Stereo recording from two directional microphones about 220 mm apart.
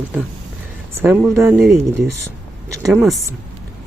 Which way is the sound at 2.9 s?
Centre (ahead or behind).